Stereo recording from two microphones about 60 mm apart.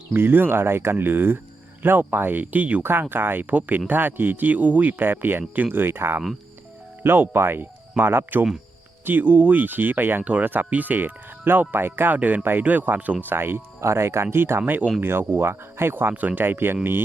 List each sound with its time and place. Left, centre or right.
0.1 s speech: right
2.8 s speech: right